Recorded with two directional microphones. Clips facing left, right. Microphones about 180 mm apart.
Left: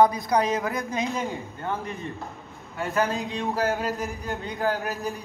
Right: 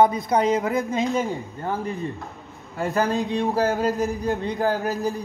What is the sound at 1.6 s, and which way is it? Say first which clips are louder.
Speech: right 4 dB; 35° right (ahead or behind).